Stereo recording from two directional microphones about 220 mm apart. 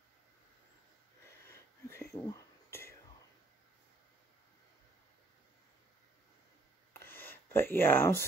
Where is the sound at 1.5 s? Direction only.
10° left (ahead or behind).